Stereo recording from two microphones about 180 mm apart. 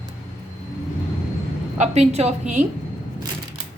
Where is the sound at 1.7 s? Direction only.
40° right (ahead or behind).